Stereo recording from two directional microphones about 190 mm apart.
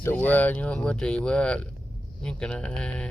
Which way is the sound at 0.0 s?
10° left (ahead or behind).